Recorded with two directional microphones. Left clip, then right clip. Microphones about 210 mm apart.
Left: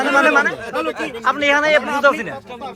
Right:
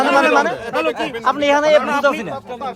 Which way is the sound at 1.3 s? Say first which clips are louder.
Right 1 dB; 20° right (ahead or behind).